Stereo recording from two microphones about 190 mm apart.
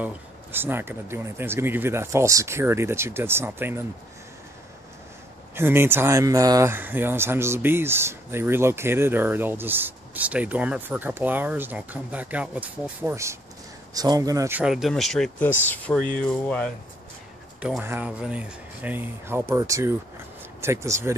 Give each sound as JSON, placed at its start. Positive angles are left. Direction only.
{"t": 0.0, "sound": "speech", "side_deg": -10}
{"t": 5.5, "sound": "a man's voice", "side_deg": -10}
{"t": 14.6, "sound": "speech", "side_deg": 0}
{"t": 17.6, "sound": "speech", "side_deg": -5}